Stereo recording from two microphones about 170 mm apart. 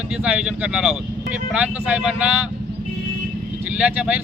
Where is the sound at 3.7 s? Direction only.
10° right (ahead or behind).